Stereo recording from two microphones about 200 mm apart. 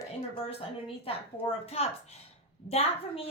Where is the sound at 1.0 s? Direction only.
30° left (ahead or behind).